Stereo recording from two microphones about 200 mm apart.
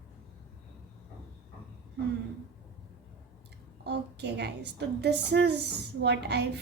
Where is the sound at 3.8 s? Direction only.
55° right (ahead or behind).